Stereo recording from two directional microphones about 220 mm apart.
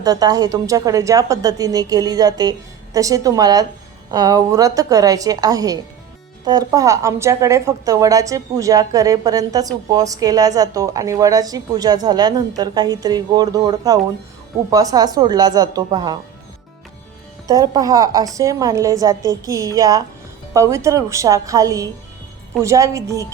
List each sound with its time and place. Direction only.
0.0 s speech: 15° right (ahead or behind)
17.5 s speech: 15° right (ahead or behind)